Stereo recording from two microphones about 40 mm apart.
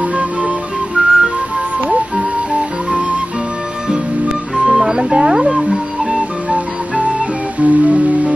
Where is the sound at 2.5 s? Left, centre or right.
Right.